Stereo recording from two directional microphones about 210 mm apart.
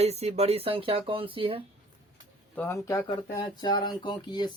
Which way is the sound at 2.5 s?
10° left (ahead or behind).